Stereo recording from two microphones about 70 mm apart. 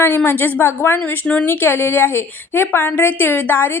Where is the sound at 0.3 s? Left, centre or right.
Left.